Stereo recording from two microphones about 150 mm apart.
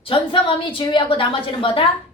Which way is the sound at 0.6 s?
35° left (ahead or behind).